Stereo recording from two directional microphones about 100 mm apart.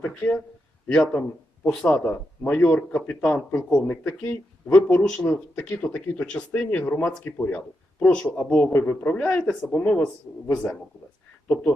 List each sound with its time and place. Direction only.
0.1 s a man's voice: 10° left (ahead or behind)